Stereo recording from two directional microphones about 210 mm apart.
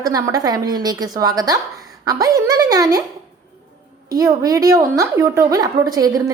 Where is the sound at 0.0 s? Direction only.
15° right (ahead or behind).